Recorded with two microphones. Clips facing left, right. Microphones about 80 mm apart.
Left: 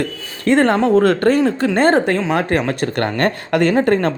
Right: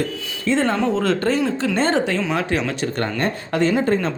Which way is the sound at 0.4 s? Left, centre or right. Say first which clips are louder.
Left 5 dB; left.